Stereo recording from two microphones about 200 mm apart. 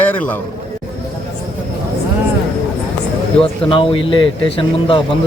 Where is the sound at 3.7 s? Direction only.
25° left (ahead or behind).